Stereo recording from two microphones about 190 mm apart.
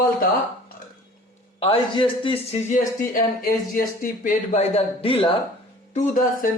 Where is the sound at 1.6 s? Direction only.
30° left (ahead or behind).